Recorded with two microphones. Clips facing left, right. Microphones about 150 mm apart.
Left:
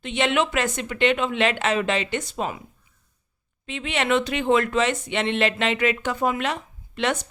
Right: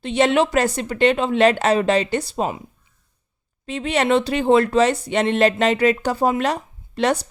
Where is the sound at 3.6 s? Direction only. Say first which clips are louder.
Right 5 dB; 35° right (ahead or behind).